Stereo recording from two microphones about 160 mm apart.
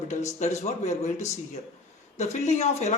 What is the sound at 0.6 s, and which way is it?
Speech, 45° left (ahead or behind).